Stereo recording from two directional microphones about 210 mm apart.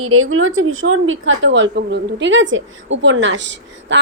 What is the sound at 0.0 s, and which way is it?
A woman's voice, 90° right.